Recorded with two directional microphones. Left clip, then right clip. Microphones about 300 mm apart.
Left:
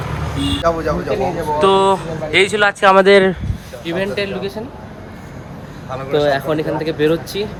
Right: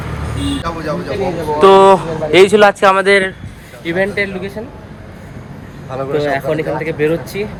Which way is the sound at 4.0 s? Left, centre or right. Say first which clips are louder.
Right 4 dB; centre.